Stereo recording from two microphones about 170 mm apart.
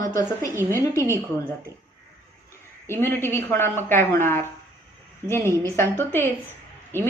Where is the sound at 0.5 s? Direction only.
15° right (ahead or behind).